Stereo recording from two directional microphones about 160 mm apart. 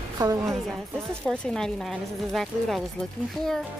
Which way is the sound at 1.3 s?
5° left (ahead or behind).